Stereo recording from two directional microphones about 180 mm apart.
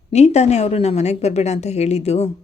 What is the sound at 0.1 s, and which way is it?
Speech, 35° left (ahead or behind).